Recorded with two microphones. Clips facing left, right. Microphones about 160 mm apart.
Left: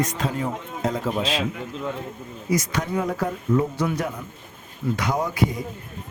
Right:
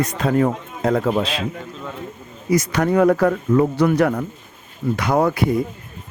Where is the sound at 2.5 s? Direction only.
65° right (ahead or behind).